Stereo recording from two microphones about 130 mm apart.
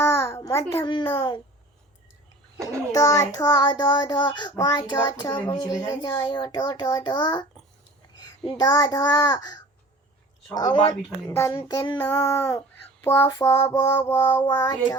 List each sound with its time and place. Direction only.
0.0 s a sound: 20° left (ahead or behind)
0.4 s a child's voice: 20° left (ahead or behind)
1.1 s a child's voice: 35° left (ahead or behind)
2.9 s a child's voice: 25° left (ahead or behind)
8.4 s child singing: 30° left (ahead or behind)
10.5 s a child's voice: 30° left (ahead or behind)
11.3 s child singing: 20° left (ahead or behind)